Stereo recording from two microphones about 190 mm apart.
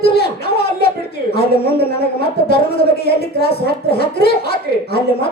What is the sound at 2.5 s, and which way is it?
Speech, 55° left (ahead or behind).